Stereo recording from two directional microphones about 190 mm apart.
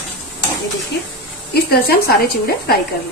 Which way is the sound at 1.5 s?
55° left (ahead or behind).